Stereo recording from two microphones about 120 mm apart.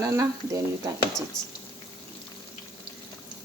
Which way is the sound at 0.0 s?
30° right (ahead or behind).